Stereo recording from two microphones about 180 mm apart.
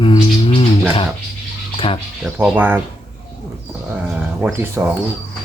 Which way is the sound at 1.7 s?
30° left (ahead or behind).